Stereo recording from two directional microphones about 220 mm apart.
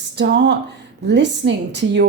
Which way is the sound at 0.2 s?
50° right (ahead or behind).